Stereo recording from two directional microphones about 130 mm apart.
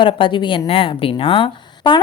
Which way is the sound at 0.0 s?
40° left (ahead or behind).